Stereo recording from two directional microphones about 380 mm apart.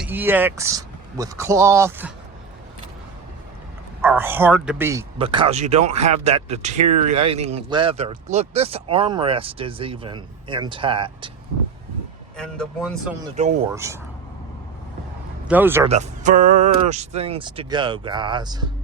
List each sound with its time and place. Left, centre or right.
0.0 s speech: centre
4.0 s speech: centre
12.4 s speech: centre
13.3 s speech: centre
13.7 s speech: centre
15.4 s speech: centre
15.9 s speech: centre